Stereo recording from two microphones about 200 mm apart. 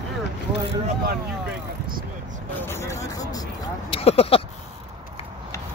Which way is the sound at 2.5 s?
10° left (ahead or behind).